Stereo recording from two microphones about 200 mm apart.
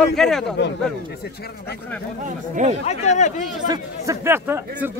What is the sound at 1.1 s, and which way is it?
Speech, 55° left (ahead or behind).